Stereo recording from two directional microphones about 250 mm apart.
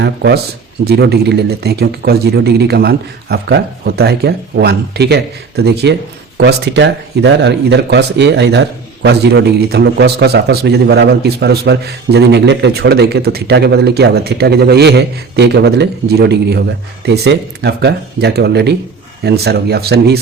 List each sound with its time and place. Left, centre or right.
0.0 s a man's voice: right